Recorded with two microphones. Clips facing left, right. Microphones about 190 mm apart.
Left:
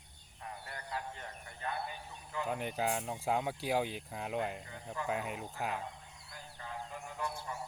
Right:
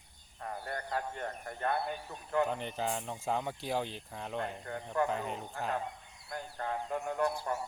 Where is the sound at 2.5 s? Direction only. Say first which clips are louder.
Even; 10° left (ahead or behind).